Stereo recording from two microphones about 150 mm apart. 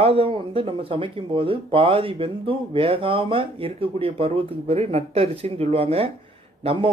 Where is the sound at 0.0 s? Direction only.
40° right (ahead or behind).